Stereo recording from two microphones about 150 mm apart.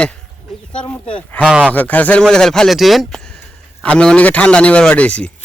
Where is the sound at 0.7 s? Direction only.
5° left (ahead or behind).